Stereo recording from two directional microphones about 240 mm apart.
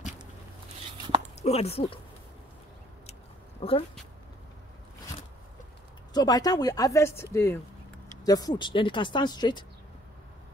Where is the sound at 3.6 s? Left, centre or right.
Left.